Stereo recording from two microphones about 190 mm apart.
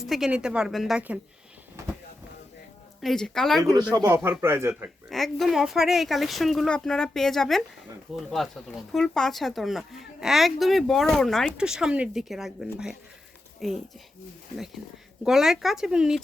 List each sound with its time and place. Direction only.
0.0 s speech: centre (ahead or behind)
3.0 s speech: centre (ahead or behind)
3.6 s speech: 15° right (ahead or behind)
5.0 s speech: centre (ahead or behind)
15.2 s speech: centre (ahead or behind)